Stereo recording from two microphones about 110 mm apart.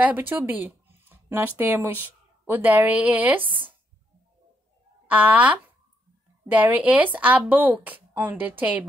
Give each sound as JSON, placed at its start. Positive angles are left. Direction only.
{"t": 0.0, "sound": "speech", "side_deg": -20}
{"t": 5.0, "sound": "a woman's voice", "side_deg": -15}